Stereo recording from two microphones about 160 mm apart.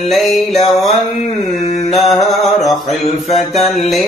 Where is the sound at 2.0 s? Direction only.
Centre (ahead or behind).